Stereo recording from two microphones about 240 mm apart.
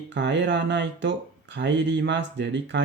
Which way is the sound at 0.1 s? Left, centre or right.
Right.